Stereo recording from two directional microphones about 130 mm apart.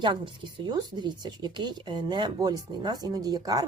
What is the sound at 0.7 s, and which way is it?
Speech, 35° right (ahead or behind).